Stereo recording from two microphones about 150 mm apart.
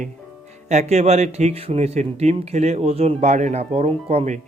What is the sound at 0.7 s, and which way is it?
Speech, 50° right (ahead or behind).